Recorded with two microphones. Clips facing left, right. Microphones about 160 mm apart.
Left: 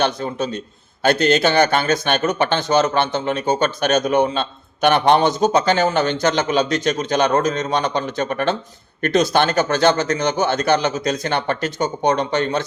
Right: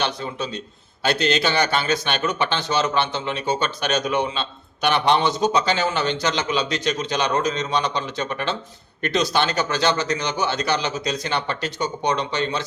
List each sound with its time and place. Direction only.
0.0 s a man's voice: 45° left (ahead or behind)